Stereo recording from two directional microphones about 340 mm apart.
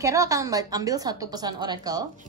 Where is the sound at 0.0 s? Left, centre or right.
Centre.